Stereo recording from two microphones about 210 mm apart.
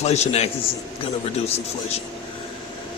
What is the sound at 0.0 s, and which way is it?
Speech, 30° left (ahead or behind).